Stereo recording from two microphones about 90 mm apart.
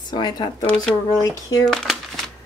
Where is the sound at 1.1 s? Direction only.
45° left (ahead or behind).